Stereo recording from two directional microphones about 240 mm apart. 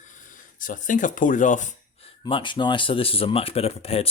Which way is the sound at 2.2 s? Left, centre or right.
Centre.